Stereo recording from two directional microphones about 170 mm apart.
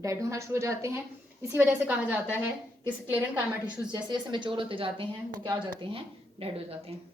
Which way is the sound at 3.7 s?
25° right (ahead or behind).